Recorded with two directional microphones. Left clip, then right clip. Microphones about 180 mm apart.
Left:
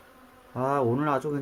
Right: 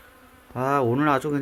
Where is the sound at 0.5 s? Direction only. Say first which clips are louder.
Right 3 dB; 5° right (ahead or behind).